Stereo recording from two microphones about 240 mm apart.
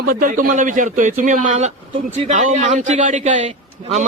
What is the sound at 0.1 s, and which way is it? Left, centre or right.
A man's voice, right.